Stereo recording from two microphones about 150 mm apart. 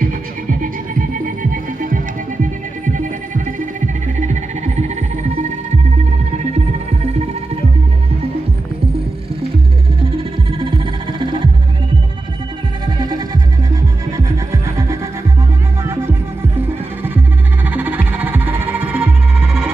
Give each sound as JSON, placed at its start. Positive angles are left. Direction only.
{"t": 0.0, "sound": "music", "side_deg": -65}
{"t": 12.8, "sound": "music", "side_deg": -25}
{"t": 15.8, "sound": "throbbing", "side_deg": -15}
{"t": 16.6, "sound": "music", "side_deg": -15}